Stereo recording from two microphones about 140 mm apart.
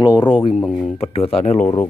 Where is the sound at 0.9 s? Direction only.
45° left (ahead or behind).